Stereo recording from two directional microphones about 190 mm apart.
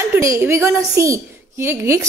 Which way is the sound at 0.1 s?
15° right (ahead or behind).